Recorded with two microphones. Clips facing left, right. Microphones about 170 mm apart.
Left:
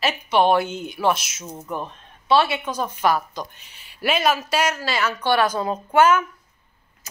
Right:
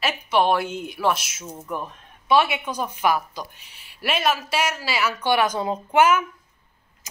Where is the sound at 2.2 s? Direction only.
15° right (ahead or behind).